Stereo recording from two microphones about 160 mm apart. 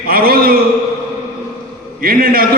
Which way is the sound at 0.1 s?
70° right (ahead or behind).